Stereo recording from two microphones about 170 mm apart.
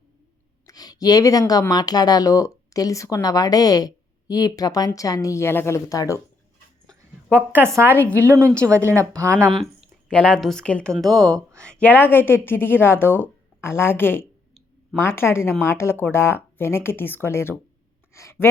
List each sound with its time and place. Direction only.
0.7 s a woman's voice: 20° left (ahead or behind)
7.3 s speech: 10° right (ahead or behind)
10.1 s a woman's voice: 5° left (ahead or behind)